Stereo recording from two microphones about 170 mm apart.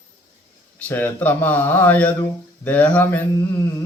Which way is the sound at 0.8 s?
10° left (ahead or behind).